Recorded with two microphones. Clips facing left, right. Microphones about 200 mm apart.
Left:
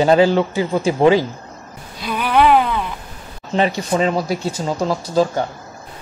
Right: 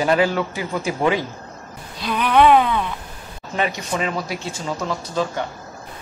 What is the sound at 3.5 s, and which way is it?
Speech, 30° left (ahead or behind).